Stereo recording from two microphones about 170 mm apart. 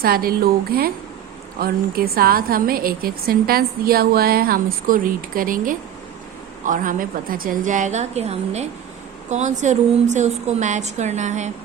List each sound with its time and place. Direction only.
0.0 s a woman's voice: 60° right (ahead or behind); by 11.5 s 45° right (ahead or behind)